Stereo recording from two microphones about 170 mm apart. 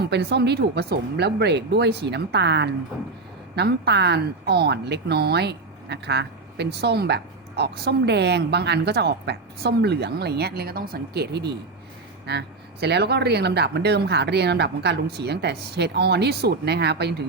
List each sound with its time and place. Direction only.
0.1 s speech: 75° right (ahead or behind)